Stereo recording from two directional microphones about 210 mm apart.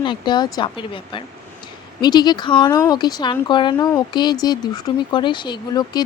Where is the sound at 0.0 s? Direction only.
20° left (ahead or behind).